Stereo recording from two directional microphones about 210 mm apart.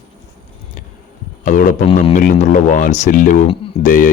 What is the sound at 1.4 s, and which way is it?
Speech, 40° left (ahead or behind).